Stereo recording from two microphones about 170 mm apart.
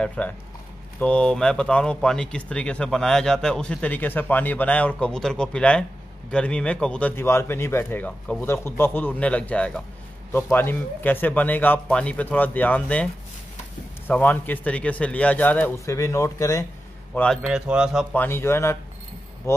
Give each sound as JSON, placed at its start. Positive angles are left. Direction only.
{"t": 0.0, "sound": "a man's voice", "side_deg": 5}
{"t": 17.1, "sound": "a man's voice", "side_deg": 10}
{"t": 17.5, "sound": "speech", "side_deg": -5}
{"t": 18.1, "sound": "a man's voice", "side_deg": 10}